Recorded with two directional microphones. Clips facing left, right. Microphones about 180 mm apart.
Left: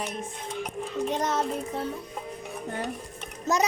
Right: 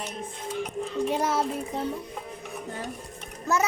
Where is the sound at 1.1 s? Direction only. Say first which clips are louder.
Right 1 dB; 10° right (ahead or behind).